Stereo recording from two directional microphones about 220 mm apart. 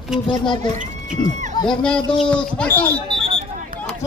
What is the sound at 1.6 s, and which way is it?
Speech, 5° left (ahead or behind).